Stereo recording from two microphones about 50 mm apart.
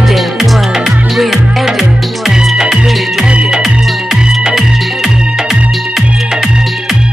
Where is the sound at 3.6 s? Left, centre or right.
Centre.